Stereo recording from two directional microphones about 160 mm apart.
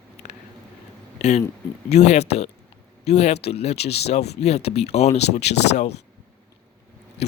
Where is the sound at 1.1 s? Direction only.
45° left (ahead or behind).